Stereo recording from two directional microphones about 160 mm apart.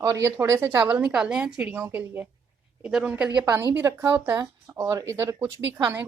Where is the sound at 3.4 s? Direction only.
20° right (ahead or behind).